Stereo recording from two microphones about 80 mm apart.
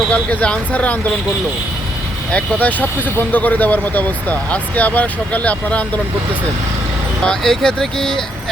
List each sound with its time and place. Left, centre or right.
0.1 s speech: centre
2.3 s speech: centre
7.3 s speech: centre